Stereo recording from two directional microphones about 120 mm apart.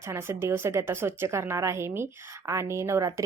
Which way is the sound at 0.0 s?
20° right (ahead or behind).